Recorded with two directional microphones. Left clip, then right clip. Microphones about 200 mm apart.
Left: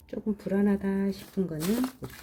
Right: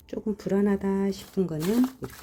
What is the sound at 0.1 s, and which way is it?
Speech, 25° right (ahead or behind).